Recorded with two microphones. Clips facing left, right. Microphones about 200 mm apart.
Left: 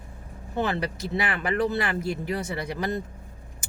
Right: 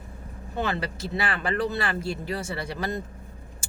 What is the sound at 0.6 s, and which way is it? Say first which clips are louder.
Speech: left 1 dB; 20° left (ahead or behind).